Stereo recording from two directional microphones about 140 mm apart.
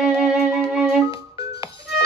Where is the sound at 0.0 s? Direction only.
5° right (ahead or behind).